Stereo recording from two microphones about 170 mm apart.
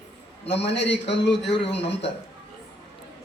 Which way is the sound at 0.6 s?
90° left.